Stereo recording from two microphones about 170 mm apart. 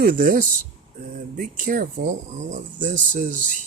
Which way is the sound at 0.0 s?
55° right (ahead or behind).